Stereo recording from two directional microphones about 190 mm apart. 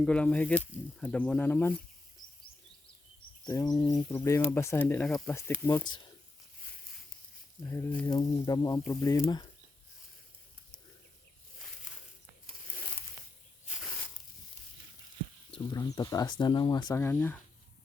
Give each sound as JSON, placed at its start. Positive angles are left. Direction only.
{"t": 0.0, "sound": "speech", "side_deg": 5}
{"t": 3.4, "sound": "speech", "side_deg": 20}
{"t": 7.6, "sound": "speech", "side_deg": 10}
{"t": 15.5, "sound": "speech", "side_deg": 20}
{"t": 16.9, "sound": "speech", "side_deg": 10}